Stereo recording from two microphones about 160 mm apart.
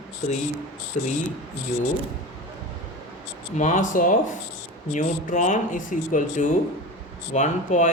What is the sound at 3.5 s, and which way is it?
Speech, 50° left (ahead or behind).